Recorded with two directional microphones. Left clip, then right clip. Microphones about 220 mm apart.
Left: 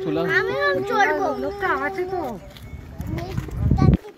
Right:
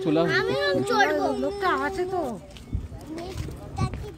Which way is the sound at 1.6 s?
50° right (ahead or behind).